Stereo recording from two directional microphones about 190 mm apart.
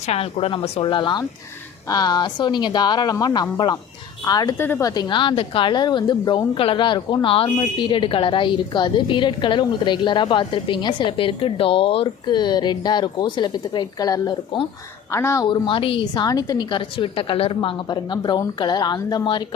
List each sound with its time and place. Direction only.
0.0 s a woman's voice: 35° left (ahead or behind); by 15.4 s 15° left (ahead or behind)
15.4 s a woman's voice: 25° left (ahead or behind)